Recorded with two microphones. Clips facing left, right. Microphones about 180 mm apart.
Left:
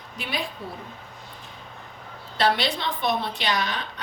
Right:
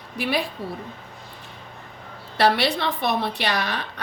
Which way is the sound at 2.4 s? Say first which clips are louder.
Right 3 dB; 65° right (ahead or behind).